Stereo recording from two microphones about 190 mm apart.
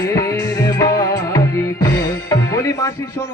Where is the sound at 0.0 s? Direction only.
15° left (ahead or behind).